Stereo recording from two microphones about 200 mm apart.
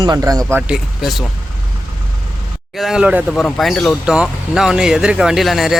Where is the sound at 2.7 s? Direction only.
Centre (ahead or behind).